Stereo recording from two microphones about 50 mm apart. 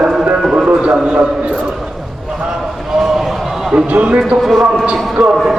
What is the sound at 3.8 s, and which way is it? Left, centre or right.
Speech, right.